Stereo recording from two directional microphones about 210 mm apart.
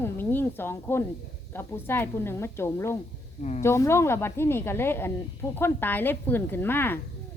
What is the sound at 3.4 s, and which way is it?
Speech, 35° left (ahead or behind).